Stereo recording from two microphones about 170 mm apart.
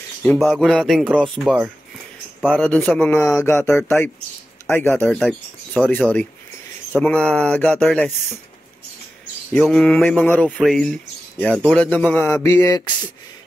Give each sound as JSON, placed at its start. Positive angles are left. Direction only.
{"t": 0.2, "sound": "a man's voice", "side_deg": 5}
{"t": 9.5, "sound": "a man's voice", "side_deg": 5}
{"t": 12.4, "sound": "a sound", "side_deg": 15}